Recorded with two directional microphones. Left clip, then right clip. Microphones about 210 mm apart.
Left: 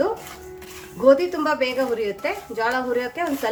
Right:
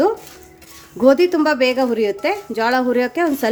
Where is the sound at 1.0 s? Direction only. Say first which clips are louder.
Right 3 dB; 45° right (ahead or behind).